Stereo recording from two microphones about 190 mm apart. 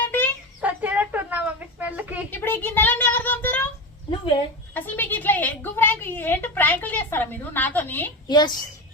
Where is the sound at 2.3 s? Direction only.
10° left (ahead or behind).